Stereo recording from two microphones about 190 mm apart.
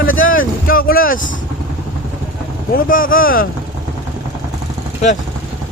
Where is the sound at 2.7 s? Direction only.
45° left (ahead or behind).